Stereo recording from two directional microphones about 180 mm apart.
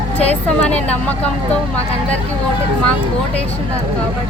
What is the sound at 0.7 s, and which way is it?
Speech, 5° left (ahead or behind).